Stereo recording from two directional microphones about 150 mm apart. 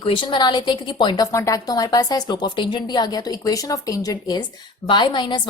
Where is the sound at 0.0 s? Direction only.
35° left (ahead or behind).